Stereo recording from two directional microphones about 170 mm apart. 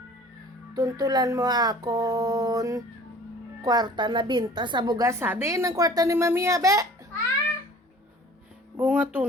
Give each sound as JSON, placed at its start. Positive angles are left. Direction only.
{"t": 0.7, "sound": "a woman's voice", "side_deg": -20}
{"t": 8.7, "sound": "speech", "side_deg": -10}